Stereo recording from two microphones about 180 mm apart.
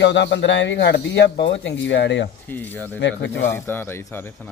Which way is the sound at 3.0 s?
80° left.